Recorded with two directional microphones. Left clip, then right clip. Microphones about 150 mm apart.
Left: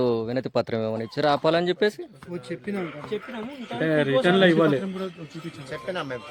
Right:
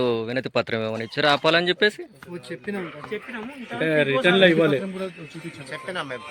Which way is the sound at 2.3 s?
90° left.